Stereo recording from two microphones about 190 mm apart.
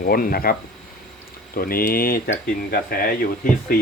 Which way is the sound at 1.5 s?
50° left (ahead or behind).